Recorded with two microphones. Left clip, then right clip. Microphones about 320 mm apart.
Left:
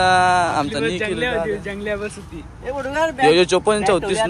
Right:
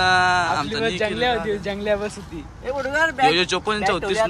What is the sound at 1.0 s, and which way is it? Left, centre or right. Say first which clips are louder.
Speech: even; right.